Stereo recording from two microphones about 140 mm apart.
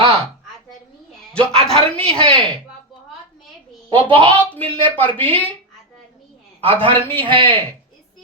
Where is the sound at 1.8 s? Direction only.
40° right (ahead or behind).